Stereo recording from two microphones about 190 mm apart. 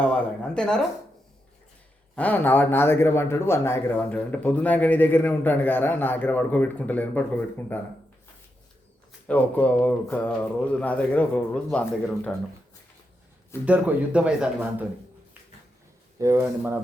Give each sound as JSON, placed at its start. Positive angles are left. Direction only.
{"t": 0.0, "sound": "speech", "side_deg": 5}
{"t": 2.1, "sound": "speech", "side_deg": 10}
{"t": 9.2, "sound": "speech", "side_deg": 10}
{"t": 13.7, "sound": "a man's voice", "side_deg": -5}
{"t": 16.1, "sound": "a man's voice", "side_deg": -15}